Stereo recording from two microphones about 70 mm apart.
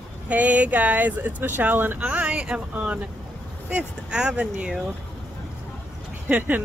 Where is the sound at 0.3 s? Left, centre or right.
Right.